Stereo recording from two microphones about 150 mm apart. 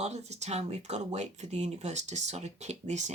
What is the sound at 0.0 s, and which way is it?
Speech, 50° right (ahead or behind).